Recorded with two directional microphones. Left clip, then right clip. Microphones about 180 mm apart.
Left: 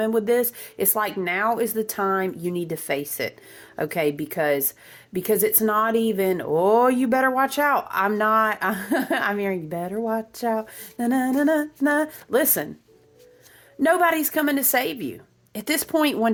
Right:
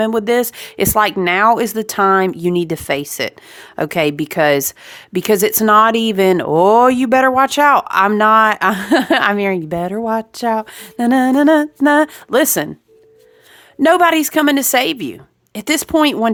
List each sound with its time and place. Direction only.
0.0 s speech: 40° right (ahead or behind)
13.8 s speech: 35° right (ahead or behind)